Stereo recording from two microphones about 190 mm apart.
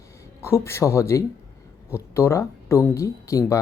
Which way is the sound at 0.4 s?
15° left (ahead or behind).